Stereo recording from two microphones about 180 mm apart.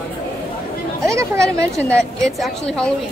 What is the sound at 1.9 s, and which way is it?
A woman's voice, 5° left (ahead or behind).